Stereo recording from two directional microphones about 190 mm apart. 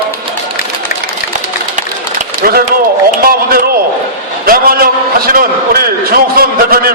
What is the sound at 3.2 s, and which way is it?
Speech, 50° right (ahead or behind).